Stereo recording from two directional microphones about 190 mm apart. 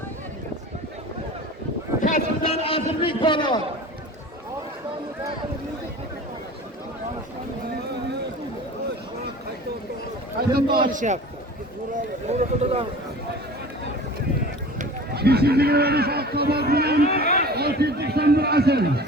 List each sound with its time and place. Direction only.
2.0 s a sound: 45° left (ahead or behind)
2.4 s a man's voice: 30° left (ahead or behind)
10.3 s a man's voice: 55° right (ahead or behind)
10.8 s a man's voice: 40° right (ahead or behind)
15.1 s a man's voice: 55° right (ahead or behind)